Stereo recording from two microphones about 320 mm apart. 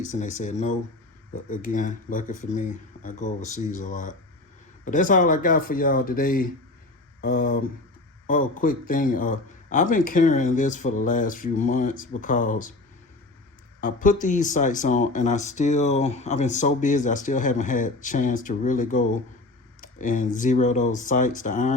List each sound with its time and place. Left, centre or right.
0.0 s speech: left
13.8 s speech: left